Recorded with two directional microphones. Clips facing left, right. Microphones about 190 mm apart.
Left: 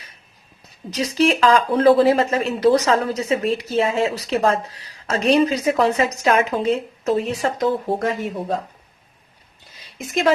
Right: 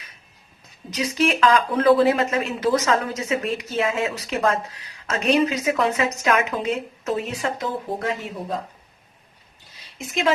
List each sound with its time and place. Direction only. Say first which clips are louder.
0.9 s speech: left 3 dB; 35° left (ahead or behind)